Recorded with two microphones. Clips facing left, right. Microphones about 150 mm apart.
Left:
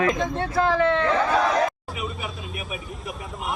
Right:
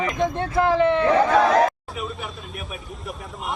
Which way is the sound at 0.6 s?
20° right (ahead or behind).